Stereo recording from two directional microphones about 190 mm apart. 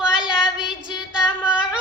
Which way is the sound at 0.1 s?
5° right (ahead or behind).